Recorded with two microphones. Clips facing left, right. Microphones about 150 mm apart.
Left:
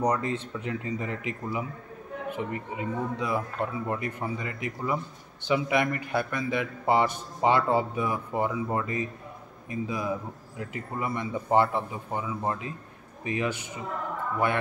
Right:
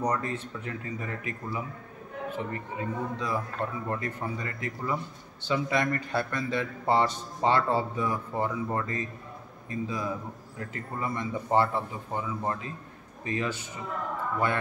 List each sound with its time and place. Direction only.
0.0 s a man's voice: 20° left (ahead or behind)